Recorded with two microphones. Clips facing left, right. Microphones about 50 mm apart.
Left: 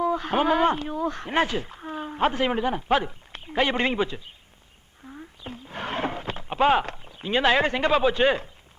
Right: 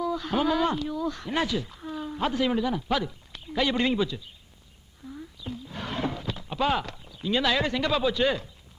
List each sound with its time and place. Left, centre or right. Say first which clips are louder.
0.0 s speech: left 3 dB; left
5.0 s roaring cats: right 1 dB; left